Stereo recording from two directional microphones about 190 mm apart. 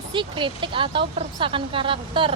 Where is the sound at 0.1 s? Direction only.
25° right (ahead or behind).